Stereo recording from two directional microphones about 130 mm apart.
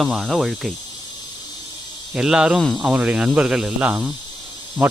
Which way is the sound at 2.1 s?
5° right (ahead or behind).